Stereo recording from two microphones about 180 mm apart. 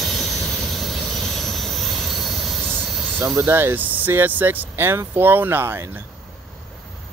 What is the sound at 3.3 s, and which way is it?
Speech, 10° right (ahead or behind).